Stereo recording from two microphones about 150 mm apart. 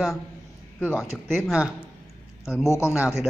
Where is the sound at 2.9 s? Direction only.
5° right (ahead or behind).